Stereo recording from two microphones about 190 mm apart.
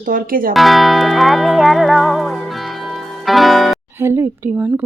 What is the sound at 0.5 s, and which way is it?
Music, centre (ahead or behind).